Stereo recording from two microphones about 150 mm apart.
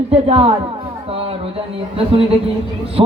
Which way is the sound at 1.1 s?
40° right (ahead or behind).